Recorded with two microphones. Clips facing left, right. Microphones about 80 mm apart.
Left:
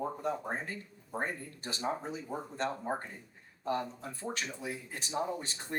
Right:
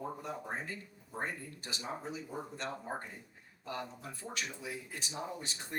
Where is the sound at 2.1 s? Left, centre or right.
Left.